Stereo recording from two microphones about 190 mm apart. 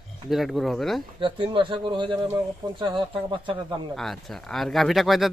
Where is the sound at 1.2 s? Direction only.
30° right (ahead or behind).